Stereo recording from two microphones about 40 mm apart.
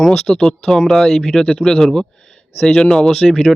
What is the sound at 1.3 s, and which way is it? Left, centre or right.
Speech, centre.